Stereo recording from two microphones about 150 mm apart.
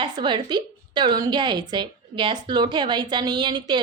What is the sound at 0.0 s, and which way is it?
A woman's voice, 30° right (ahead or behind).